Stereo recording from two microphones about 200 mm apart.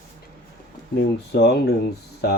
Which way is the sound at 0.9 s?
60° left (ahead or behind).